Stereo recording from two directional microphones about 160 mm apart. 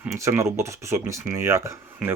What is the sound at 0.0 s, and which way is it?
Speech, 20° right (ahead or behind).